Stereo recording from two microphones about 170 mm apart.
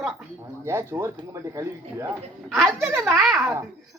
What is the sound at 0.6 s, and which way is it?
Speech, 15° right (ahead or behind).